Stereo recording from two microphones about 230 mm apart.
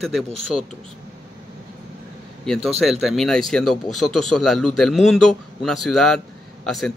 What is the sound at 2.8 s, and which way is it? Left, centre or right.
Speech, centre.